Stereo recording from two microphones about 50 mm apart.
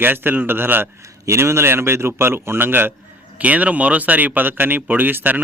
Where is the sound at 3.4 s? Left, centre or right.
Right.